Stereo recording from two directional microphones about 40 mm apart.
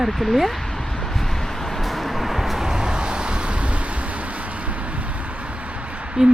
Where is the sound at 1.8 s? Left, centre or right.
Centre; by 3.5 s right.